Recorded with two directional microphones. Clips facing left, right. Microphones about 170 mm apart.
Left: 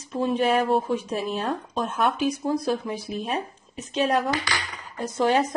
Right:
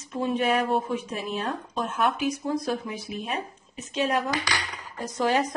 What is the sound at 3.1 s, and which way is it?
A woman's voice, 35° left (ahead or behind).